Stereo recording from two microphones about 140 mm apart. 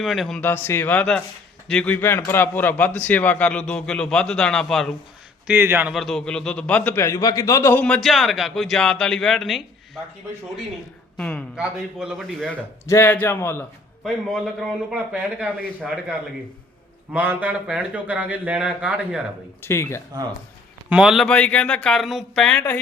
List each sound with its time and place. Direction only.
0.0 s a man's voice: centre (ahead or behind)
0.4 s a man's voice: 15° left (ahead or behind)
5.5 s speech: 15° right (ahead or behind)
5.9 s a man's voice: centre (ahead or behind)
11.2 s a man's voice: 10° left (ahead or behind)
11.5 s a man's voice: 5° right (ahead or behind)
12.8 s a man's voice: 20° left (ahead or behind)
14.0 s a man's voice: 5° right (ahead or behind)
17.1 s speech: 10° right (ahead or behind)
19.6 s speech: 20° left (ahead or behind)
20.9 s a man's voice: 5° right (ahead or behind)